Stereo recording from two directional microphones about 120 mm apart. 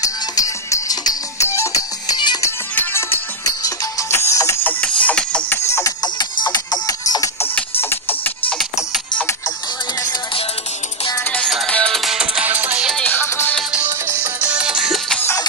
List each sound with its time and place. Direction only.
0.0 s music: 25° left (ahead or behind)
2.4 s music: 20° left (ahead or behind)
4.7 s music: 10° left (ahead or behind)
6.0 s music: 35° left (ahead or behind)
7.8 s music: 20° left (ahead or behind)
11.3 s music: 5° left (ahead or behind)
12.9 s music: 10° left (ahead or behind)
13.6 s music: 10° right (ahead or behind)
13.8 s music: 20° right (ahead or behind); by 15.1 s 5° right (ahead or behind)